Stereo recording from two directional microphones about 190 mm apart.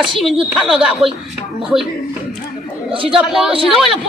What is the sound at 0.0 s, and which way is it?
Speech, centre (ahead or behind).